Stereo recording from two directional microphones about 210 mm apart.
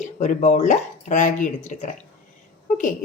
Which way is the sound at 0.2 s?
35° left (ahead or behind).